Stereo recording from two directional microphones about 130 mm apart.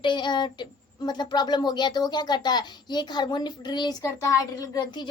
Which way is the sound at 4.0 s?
25° left (ahead or behind).